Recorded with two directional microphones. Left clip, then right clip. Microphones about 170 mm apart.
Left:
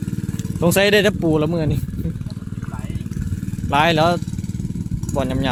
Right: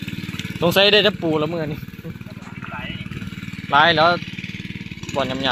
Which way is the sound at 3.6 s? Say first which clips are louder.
Right 2 dB; 20° left (ahead or behind).